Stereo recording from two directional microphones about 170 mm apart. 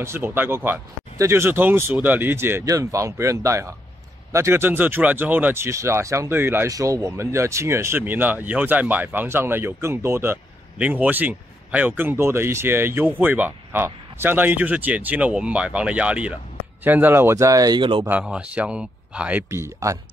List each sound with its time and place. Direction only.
0.0 s speech: 15° right (ahead or behind)
18.0 s speech: 10° right (ahead or behind)